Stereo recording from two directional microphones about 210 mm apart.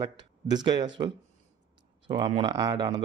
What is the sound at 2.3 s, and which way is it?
Speech, 25° right (ahead or behind).